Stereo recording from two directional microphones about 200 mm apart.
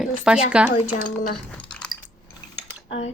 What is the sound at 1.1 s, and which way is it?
Cutlery, 5° left (ahead or behind).